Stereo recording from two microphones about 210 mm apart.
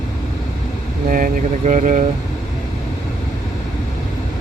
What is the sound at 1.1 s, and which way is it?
Speech, 40° right (ahead or behind).